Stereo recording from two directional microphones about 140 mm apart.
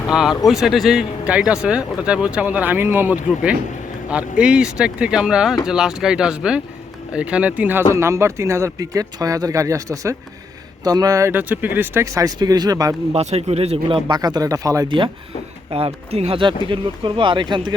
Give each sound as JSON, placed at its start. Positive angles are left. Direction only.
{"t": 0.1, "sound": "speech", "side_deg": -5}
{"t": 13.1, "sound": "speech", "side_deg": -50}
{"t": 14.2, "sound": "speech", "side_deg": -25}
{"t": 14.8, "sound": "speech", "side_deg": -35}